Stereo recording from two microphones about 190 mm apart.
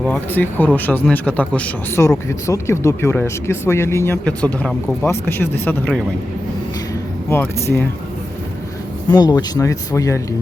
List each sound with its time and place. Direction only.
0.0 s speech: 10° left (ahead or behind)
7.3 s speech: 15° left (ahead or behind)
9.0 s speech: 20° left (ahead or behind)